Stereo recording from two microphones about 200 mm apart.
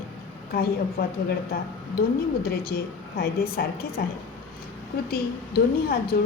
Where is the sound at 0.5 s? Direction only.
50° left (ahead or behind).